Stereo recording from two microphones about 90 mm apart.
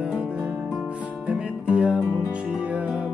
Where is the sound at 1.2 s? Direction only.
15° right (ahead or behind).